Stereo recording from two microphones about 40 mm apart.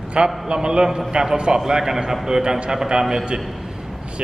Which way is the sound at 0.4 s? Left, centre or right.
Right.